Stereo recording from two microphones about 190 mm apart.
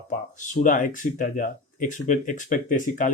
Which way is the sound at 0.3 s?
40° left (ahead or behind).